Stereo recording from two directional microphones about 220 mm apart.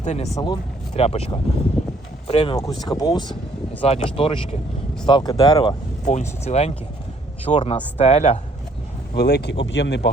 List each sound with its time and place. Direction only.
0.0 s speech: 30° left (ahead or behind)
0.3 s speech: 20° left (ahead or behind)
6.1 s speech: 30° left (ahead or behind)
9.1 s speech: 50° left (ahead or behind)